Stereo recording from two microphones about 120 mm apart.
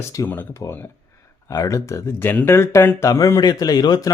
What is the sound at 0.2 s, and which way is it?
Speech, 30° left (ahead or behind).